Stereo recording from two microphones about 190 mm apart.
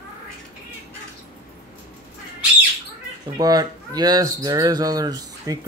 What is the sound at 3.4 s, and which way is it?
Speech, 20° right (ahead or behind).